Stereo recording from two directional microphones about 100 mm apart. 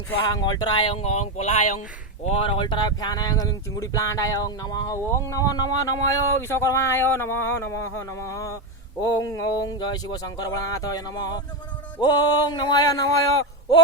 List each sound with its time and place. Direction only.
0.3 s speech: 40° left (ahead or behind)
0.9 s speech: 90° left
2.2 s speech: 75° left (ahead or behind); by 13.8 s 40° left (ahead or behind)